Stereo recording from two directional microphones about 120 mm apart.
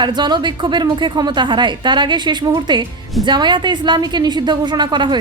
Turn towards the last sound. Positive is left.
turn(degrees=-40)  # may be behind; listen again after turning